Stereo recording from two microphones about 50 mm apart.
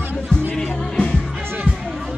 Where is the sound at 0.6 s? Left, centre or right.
Centre.